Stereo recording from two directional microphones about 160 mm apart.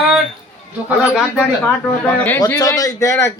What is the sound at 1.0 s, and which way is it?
Speech, 5° right (ahead or behind).